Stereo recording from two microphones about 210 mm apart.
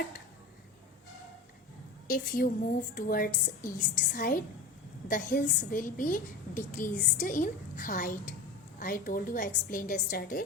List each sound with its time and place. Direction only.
2.0 s a woman's voice: 45° left (ahead or behind)